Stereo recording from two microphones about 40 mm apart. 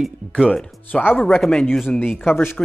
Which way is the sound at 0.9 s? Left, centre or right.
Left.